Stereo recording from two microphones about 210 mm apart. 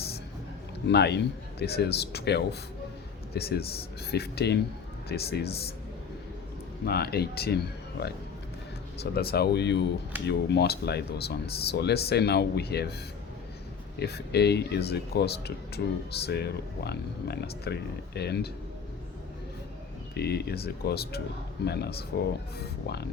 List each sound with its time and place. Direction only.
0.9 s speech: 55° left (ahead or behind)
6.8 s speech: 50° left (ahead or behind)
14.0 s speech: 50° left (ahead or behind)
20.1 s speech: 50° left (ahead or behind)